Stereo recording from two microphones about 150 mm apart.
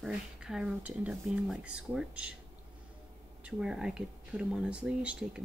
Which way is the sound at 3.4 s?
5° right (ahead or behind).